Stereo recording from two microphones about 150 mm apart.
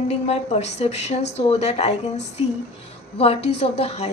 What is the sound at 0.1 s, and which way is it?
Speech, 45° left (ahead or behind).